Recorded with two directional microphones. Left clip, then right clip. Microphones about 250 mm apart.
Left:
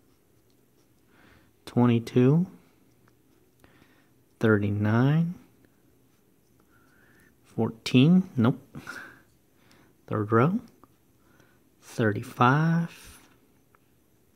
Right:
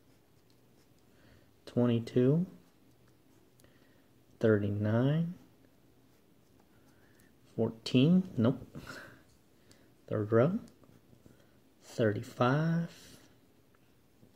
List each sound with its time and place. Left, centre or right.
1.2 s a sound: left
4.4 s speech: left
7.4 s speech: left
11.8 s speech: left